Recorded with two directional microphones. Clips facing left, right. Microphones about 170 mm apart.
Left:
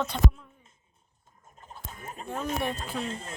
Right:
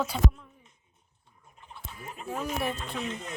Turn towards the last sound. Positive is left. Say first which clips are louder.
# left 1 dB
turn(degrees=30)  # may be behind; listen again after turning